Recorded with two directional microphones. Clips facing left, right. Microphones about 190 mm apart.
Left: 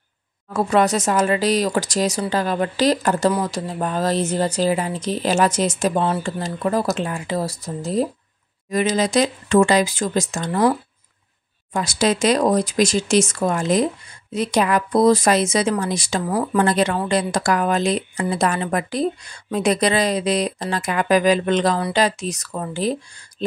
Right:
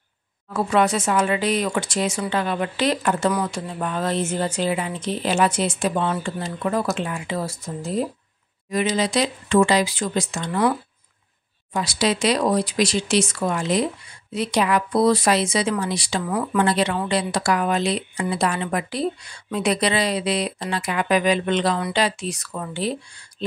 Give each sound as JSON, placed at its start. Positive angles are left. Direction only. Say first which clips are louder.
{"t": 0.5, "sound": "speech", "louder": "left 2 dB", "side_deg": 40}
{"t": 11.7, "sound": "speech", "louder": "left 2 dB", "side_deg": 45}